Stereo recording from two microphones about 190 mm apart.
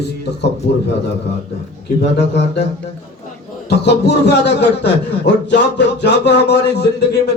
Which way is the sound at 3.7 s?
60° left (ahead or behind).